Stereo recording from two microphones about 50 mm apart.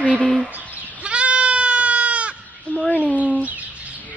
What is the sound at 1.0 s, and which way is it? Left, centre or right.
Sheep, right.